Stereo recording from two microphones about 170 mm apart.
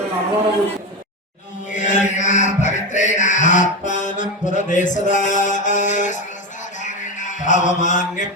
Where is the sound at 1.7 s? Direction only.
45° left (ahead or behind).